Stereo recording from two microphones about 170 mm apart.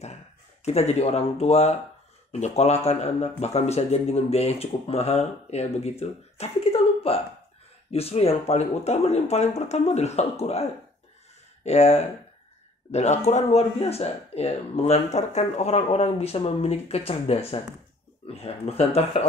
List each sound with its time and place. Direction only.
0.7 s speech: 40° left (ahead or behind)